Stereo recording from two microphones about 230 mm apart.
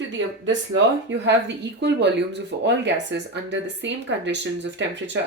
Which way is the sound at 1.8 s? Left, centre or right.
Right.